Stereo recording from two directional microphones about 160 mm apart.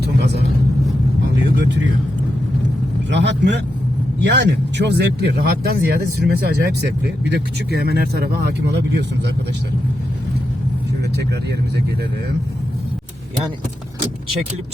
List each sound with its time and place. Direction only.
0.0 s vehicle: 90° right
1.5 s vehicle: 90° right
3.1 s speech: 90° right